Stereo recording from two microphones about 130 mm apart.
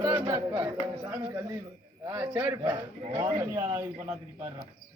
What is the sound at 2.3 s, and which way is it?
A man's voice, 15° right (ahead or behind).